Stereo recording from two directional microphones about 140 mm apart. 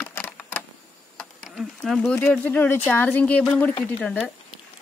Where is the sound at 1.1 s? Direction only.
Centre (ahead or behind).